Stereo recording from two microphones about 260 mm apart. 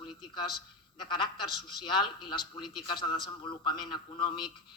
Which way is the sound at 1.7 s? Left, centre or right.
Centre.